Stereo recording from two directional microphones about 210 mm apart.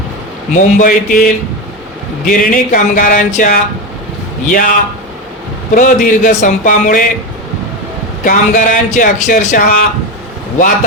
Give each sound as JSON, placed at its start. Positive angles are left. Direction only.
{"t": 0.5, "sound": "speech", "side_deg": 40}
{"t": 5.7, "sound": "speech", "side_deg": 40}
{"t": 8.2, "sound": "speech", "side_deg": 40}